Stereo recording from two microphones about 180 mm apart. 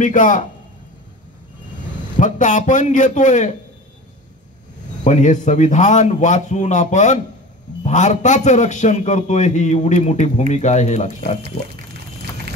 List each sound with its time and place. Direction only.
0.0 s a man's voice: 45° left (ahead or behind)
2.1 s a man's voice: 45° left (ahead or behind)
5.0 s a man's voice: 40° left (ahead or behind)